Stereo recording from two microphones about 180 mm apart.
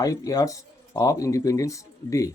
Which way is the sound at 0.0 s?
20° left (ahead or behind).